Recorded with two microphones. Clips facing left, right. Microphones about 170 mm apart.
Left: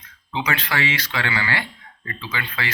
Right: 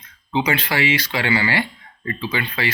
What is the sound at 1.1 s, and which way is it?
Speech, 15° right (ahead or behind).